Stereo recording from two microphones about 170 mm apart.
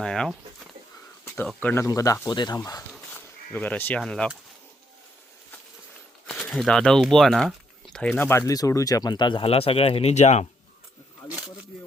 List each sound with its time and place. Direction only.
0.0 s speech: 5° left (ahead or behind)
1.5 s speech: 10° left (ahead or behind)
3.5 s speech: 10° left (ahead or behind)
6.2 s speech: 5° left (ahead or behind); by 10.4 s 40° left (ahead or behind)